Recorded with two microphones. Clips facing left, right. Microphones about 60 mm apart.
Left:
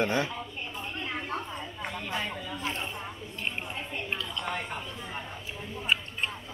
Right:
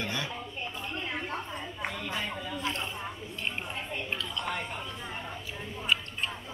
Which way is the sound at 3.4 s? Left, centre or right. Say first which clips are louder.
Even; centre.